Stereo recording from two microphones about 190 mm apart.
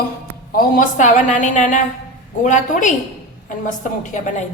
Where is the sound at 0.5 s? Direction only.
50° left (ahead or behind).